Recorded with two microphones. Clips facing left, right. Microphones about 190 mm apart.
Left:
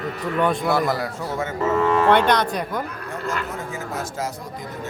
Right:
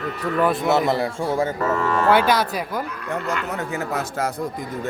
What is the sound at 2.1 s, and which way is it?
Speech, 5° right (ahead or behind).